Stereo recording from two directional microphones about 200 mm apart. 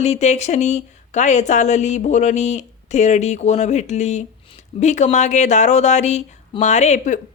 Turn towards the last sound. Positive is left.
turn(degrees=35)  # may be behind; listen again after turning